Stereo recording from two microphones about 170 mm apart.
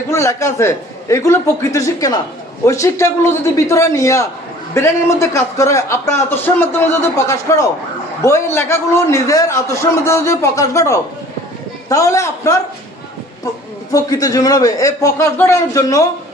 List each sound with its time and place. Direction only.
0.1 s a man's voice: 15° left (ahead or behind)
13.9 s a man's voice: 20° left (ahead or behind)